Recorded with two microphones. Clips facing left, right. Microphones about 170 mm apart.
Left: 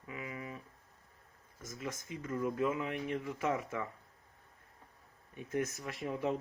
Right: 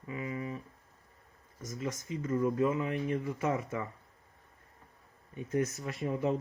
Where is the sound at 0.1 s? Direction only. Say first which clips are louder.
Right 6 dB; 5° left (ahead or behind).